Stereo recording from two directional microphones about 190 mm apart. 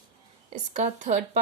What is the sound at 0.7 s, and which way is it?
Speech, 40° right (ahead or behind).